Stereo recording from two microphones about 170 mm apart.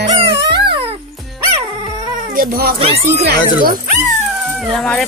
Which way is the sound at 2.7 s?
35° right (ahead or behind).